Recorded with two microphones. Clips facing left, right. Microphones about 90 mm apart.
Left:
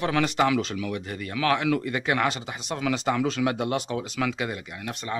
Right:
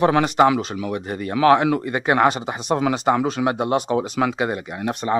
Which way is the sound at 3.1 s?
35° right (ahead or behind).